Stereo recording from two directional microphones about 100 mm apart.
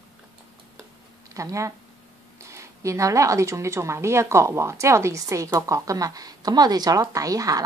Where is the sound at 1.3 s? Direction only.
30° right (ahead or behind).